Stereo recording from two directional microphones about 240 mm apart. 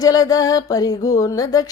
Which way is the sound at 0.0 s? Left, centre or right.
Centre.